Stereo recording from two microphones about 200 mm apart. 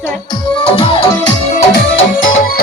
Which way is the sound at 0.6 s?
25° left (ahead or behind).